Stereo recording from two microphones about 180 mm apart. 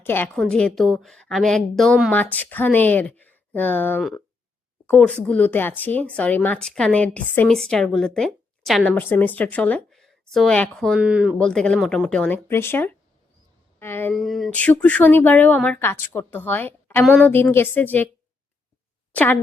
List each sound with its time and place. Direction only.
0.0 s speech: 10° left (ahead or behind); by 11.3 s 5° right (ahead or behind)
11.3 s speech: 5° left (ahead or behind)
14.1 s speech: centre (ahead or behind)
19.1 s speech: 10° left (ahead or behind)